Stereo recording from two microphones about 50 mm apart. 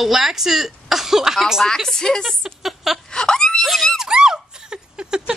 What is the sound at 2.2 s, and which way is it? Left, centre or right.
Speech, centre.